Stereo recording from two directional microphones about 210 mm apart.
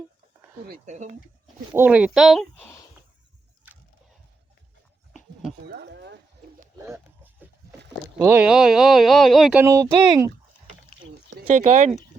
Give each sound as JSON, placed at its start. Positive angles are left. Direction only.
{"t": 0.7, "sound": "speech", "side_deg": -35}
{"t": 1.7, "sound": "speech", "side_deg": -10}
{"t": 5.6, "sound": "a sound", "side_deg": -55}
{"t": 6.8, "sound": "a sound", "side_deg": -10}
{"t": 8.2, "sound": "speech", "side_deg": -10}
{"t": 11.4, "sound": "speech", "side_deg": -30}